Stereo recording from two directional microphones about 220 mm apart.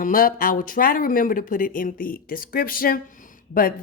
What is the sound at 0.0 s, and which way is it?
Speech, 40° left (ahead or behind).